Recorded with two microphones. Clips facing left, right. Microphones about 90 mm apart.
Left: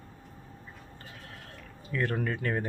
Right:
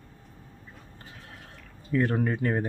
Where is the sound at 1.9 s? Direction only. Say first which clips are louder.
Right 5 dB; 15° right (ahead or behind).